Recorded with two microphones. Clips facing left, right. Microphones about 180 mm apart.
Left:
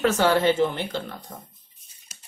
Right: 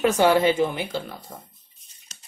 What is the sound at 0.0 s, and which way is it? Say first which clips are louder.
Speech: right 2 dB; 15° right (ahead or behind).